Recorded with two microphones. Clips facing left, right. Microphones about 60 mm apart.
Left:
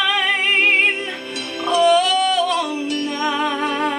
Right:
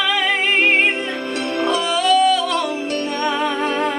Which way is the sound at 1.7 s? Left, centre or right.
Centre.